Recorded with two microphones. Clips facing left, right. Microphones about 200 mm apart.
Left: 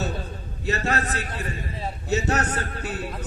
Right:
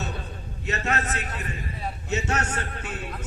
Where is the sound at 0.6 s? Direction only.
35° left (ahead or behind).